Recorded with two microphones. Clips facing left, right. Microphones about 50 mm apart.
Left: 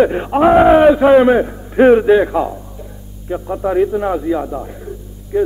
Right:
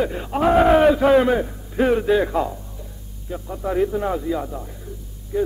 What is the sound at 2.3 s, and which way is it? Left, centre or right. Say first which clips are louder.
Music: left 5 dB; centre.